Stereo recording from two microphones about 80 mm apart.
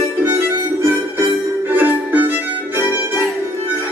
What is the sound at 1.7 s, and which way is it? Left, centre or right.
Music, right.